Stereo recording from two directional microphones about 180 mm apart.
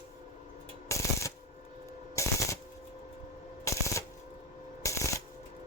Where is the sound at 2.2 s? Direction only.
15° left (ahead or behind).